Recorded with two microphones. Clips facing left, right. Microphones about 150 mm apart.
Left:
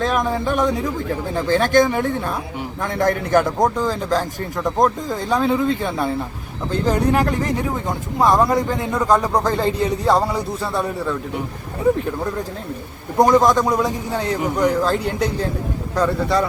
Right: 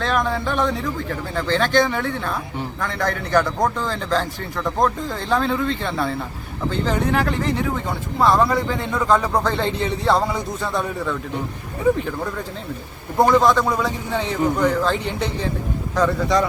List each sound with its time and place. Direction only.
0.0 s a man's voice: 15° left (ahead or behind)
13.1 s a man's voice: 15° left (ahead or behind)